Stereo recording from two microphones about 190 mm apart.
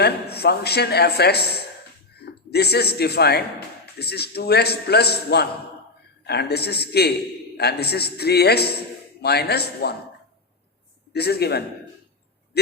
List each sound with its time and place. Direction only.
0.0 s a man's voice: 60° left (ahead or behind)
11.1 s a man's voice: 55° left (ahead or behind)